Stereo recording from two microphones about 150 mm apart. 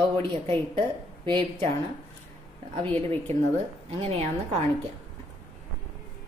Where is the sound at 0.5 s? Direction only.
35° right (ahead or behind).